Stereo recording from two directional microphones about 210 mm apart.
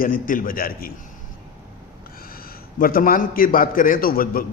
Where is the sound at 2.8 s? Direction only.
45° left (ahead or behind).